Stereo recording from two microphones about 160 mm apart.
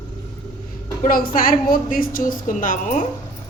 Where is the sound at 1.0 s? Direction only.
65° left (ahead or behind).